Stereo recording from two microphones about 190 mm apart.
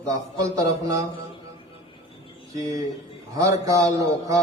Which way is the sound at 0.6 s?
20° right (ahead or behind).